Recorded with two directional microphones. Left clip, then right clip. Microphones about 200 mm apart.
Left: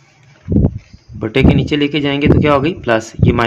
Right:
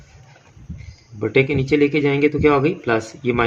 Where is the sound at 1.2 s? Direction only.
35° left (ahead or behind).